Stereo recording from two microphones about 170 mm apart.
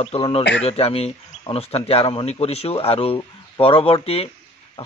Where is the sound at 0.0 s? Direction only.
35° left (ahead or behind).